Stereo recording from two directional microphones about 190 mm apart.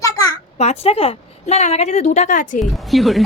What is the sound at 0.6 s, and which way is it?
A woman's voice, 35° left (ahead or behind).